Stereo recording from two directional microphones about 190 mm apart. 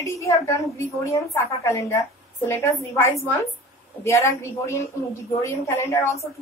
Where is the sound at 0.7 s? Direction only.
15° left (ahead or behind).